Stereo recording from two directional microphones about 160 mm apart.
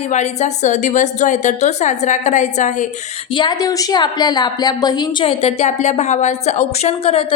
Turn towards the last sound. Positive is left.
turn(degrees=40)  # may be behind; listen again after turning